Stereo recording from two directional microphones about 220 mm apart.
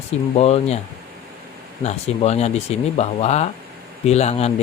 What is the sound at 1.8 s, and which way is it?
Speech, 30° left (ahead or behind).